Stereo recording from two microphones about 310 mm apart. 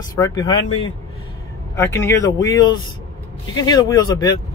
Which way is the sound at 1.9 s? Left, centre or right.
Centre.